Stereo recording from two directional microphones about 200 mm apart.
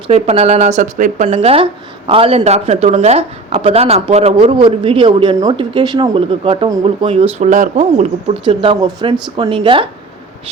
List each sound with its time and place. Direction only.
0.1 s speech: 30° right (ahead or behind)
8.4 s speech: 25° right (ahead or behind)